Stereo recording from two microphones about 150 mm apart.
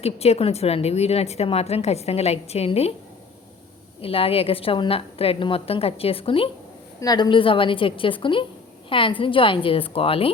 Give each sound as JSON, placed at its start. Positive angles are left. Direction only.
{"t": 0.0, "sound": "a woman's voice", "side_deg": 45}
{"t": 4.0, "sound": "a woman's voice", "side_deg": 40}
{"t": 7.0, "sound": "a woman's voice", "side_deg": 30}